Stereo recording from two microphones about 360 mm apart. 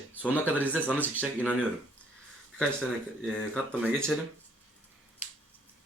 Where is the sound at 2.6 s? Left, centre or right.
Centre.